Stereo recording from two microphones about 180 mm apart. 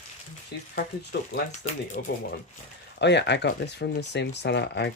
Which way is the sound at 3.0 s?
70° left (ahead or behind).